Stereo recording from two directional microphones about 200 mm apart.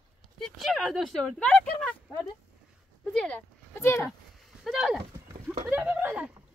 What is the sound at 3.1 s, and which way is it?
Speech, 5° left (ahead or behind).